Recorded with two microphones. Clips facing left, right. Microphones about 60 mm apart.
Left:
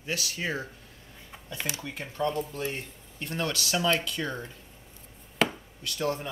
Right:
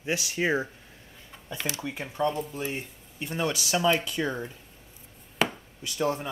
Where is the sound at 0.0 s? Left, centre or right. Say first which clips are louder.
Right 5 dB; right.